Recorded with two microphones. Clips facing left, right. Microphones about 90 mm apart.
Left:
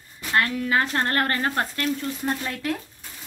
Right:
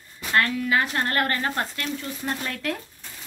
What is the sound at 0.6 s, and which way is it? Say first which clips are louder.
Speech: left 1 dB; 35° left (ahead or behind).